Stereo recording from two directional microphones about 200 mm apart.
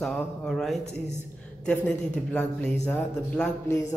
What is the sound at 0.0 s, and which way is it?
Speech, centre (ahead or behind).